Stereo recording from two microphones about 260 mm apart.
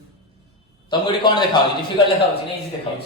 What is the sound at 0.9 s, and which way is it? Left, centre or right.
Speech, centre.